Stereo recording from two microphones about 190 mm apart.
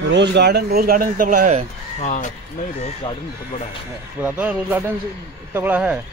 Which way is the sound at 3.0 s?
30° left (ahead or behind).